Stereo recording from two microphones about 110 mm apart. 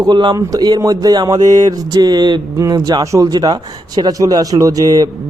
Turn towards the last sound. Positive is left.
turn(degrees=-35)  # may be behind; listen again after turning